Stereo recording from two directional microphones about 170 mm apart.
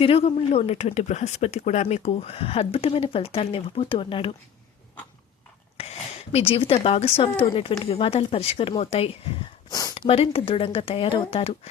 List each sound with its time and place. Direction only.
0.0 s speech: 35° left (ahead or behind)
5.8 s a sound: 35° left (ahead or behind)
6.3 s speech: 35° left (ahead or behind)
9.6 s speech: 20° left (ahead or behind)
10.1 s speech: 35° left (ahead or behind)